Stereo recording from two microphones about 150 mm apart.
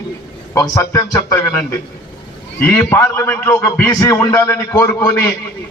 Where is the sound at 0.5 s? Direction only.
20° left (ahead or behind).